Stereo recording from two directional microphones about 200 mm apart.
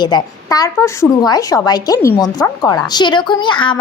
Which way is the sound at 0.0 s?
20° left (ahead or behind).